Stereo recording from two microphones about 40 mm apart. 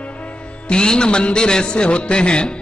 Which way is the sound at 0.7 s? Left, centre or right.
Left.